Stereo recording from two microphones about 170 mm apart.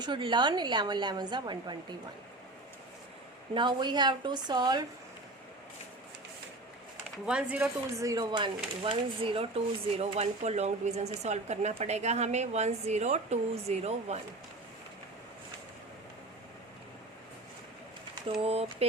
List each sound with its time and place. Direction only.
0.0 s speech: 25° right (ahead or behind)
3.5 s speech: 25° right (ahead or behind)
7.3 s speech: 5° right (ahead or behind); by 14.2 s 40° right (ahead or behind)
18.3 s speech: 35° right (ahead or behind)